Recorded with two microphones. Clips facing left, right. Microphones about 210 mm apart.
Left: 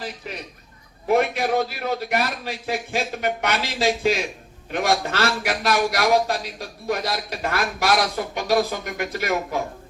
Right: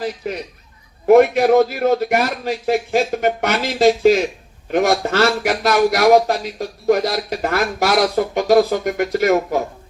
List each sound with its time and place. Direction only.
1.0 s a man's voice: 50° right (ahead or behind)